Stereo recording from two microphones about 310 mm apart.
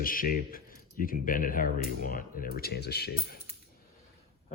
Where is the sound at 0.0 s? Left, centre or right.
Left.